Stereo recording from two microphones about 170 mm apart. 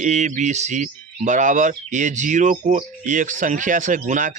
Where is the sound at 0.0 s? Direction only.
45° right (ahead or behind).